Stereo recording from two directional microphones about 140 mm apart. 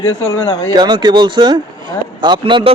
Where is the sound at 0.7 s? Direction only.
30° right (ahead or behind).